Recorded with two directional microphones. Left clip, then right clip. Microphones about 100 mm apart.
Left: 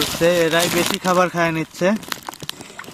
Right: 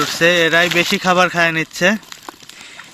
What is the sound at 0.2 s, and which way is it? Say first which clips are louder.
Speech: right 4 dB; 5° right (ahead or behind).